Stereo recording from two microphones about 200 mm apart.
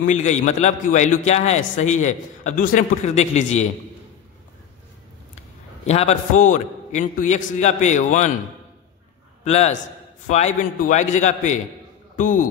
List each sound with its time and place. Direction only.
0.0 s a man's voice: 35° left (ahead or behind)
5.9 s a man's voice: 35° left (ahead or behind)
9.4 s a man's voice: 35° left (ahead or behind)